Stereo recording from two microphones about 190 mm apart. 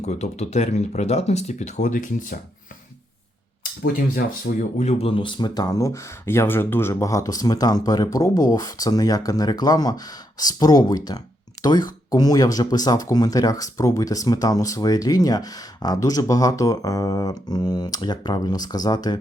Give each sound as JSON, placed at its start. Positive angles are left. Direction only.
{"t": 0.0, "sound": "speech", "side_deg": 35}
{"t": 4.5, "sound": "speech", "side_deg": 60}
{"t": 4.8, "sound": "speech", "side_deg": 35}